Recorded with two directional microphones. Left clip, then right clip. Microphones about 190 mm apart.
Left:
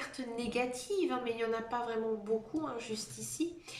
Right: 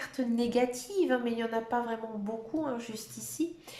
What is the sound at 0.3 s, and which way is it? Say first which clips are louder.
Speech: right 6 dB; 35° right (ahead or behind).